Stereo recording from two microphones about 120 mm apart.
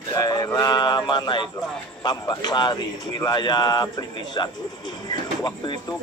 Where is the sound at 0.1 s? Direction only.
30° left (ahead or behind).